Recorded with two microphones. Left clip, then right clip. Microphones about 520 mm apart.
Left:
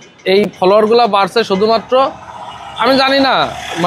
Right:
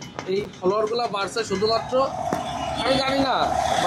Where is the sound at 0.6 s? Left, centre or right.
Left.